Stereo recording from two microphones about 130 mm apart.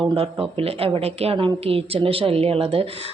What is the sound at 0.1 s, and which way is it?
A woman's voice, 45° right (ahead or behind).